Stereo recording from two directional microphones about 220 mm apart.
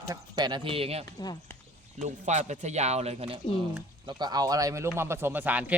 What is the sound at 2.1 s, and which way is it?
A man's voice, 30° right (ahead or behind).